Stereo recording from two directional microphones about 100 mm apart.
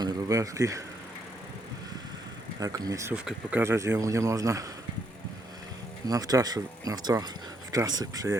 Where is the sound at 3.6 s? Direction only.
30° right (ahead or behind).